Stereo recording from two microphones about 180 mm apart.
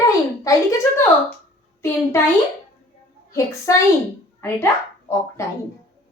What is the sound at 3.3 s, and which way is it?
Speech, 15° left (ahead or behind).